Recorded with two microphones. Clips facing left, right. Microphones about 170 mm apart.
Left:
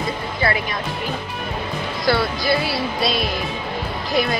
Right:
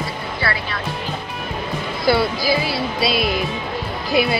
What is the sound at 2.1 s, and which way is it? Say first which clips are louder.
Speech: right 2 dB; centre (ahead or behind).